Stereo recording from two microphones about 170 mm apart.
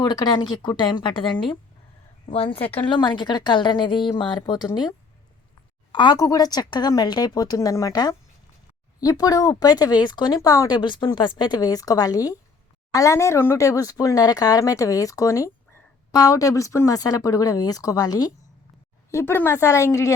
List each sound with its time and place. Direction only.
0.0 s speech: 25° left (ahead or behind)